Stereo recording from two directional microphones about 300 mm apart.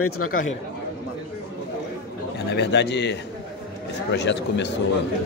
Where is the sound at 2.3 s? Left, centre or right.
Left.